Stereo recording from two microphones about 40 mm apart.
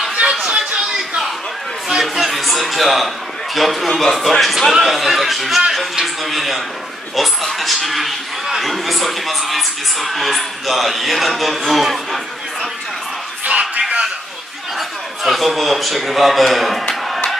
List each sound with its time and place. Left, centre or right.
0.2 s a sound: centre
1.9 s music: centre
3.5 s a man's voice: centre
13.5 s a sound: right
14.8 s a man's voice: centre
17.1 s battle cry: centre